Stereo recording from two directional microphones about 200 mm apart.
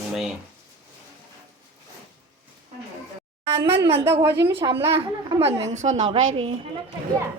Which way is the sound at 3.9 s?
10° right (ahead or behind).